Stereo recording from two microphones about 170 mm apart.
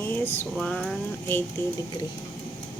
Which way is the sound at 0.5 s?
5° left (ahead or behind).